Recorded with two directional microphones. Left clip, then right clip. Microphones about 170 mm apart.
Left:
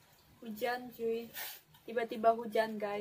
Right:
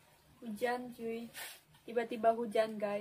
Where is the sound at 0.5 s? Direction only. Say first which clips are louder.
Even; 15° right (ahead or behind).